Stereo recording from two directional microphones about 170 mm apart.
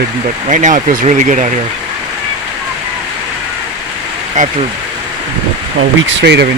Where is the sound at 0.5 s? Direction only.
50° right (ahead or behind).